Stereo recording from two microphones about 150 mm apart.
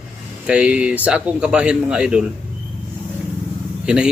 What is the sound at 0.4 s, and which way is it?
A man's voice, 5° right (ahead or behind).